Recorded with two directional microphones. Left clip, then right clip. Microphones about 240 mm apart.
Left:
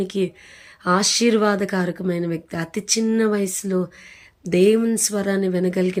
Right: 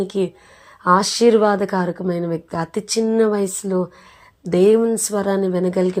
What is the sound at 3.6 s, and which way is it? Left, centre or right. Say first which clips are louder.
Speech: right 2 dB; left.